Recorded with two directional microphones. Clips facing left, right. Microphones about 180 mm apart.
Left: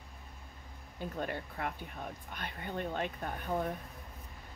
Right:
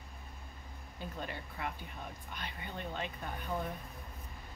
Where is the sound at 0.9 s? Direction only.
55° left (ahead or behind).